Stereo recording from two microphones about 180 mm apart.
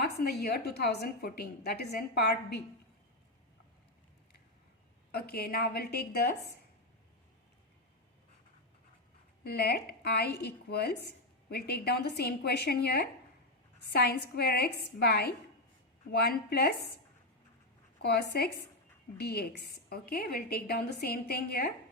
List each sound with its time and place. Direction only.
0.0 s a woman's voice: 60° left (ahead or behind)
5.1 s a woman's voice: 60° left (ahead or behind)
9.4 s a woman's voice: 60° left (ahead or behind)
18.0 s a woman's voice: 65° left (ahead or behind)